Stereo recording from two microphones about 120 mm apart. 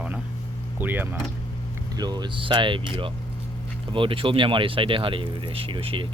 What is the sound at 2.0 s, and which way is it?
Speech, 35° right (ahead or behind).